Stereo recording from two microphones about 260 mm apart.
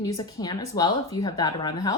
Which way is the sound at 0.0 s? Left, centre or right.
Centre.